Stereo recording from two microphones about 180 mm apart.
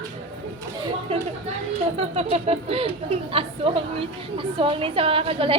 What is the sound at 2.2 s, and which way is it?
Speech, 35° right (ahead or behind).